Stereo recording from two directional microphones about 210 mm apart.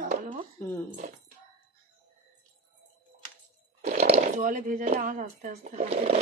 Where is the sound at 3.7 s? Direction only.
30° right (ahead or behind).